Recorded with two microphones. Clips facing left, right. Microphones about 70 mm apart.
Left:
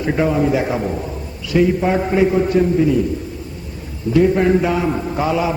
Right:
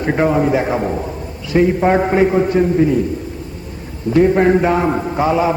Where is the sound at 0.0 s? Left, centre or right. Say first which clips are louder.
Right 2 dB; right.